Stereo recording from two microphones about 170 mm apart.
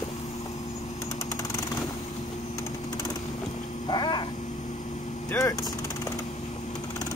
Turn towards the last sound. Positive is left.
turn(degrees=15)  # may be behind; listen again after turning